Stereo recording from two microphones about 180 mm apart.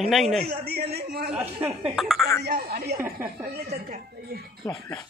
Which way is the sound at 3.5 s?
60° right (ahead or behind).